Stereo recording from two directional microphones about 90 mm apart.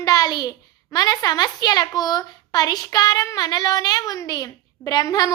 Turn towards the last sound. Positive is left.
turn(degrees=45)  # may be behind; listen again after turning